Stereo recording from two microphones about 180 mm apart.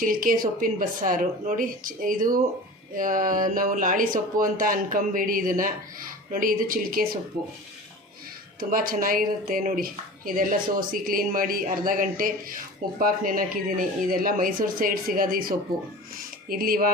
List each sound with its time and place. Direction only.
0.0 s speech: 50° right (ahead or behind)
8.7 s speech: 50° right (ahead or behind)